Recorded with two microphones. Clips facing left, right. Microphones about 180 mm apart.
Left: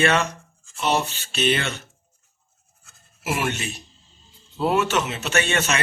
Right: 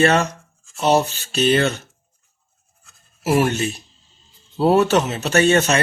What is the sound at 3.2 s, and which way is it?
Speech, 40° right (ahead or behind).